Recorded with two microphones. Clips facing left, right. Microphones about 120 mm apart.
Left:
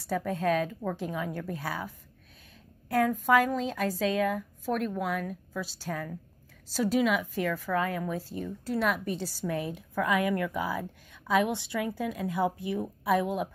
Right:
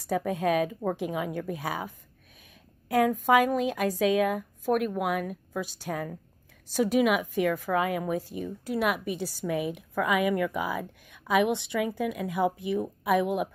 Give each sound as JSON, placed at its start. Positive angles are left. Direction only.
{"t": 0.0, "sound": "a woman's voice", "side_deg": -15}
{"t": 3.3, "sound": "a woman's voice", "side_deg": -15}